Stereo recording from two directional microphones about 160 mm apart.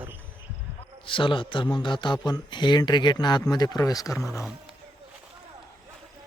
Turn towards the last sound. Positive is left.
turn(degrees=0)  # may be behind; listen again after turning